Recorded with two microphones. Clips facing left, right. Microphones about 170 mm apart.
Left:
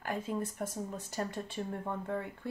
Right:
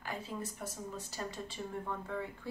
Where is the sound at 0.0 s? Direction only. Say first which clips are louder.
Left 6 dB; 50° left (ahead or behind).